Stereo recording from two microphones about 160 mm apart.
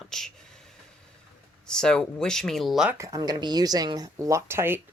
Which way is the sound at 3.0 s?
20° right (ahead or behind).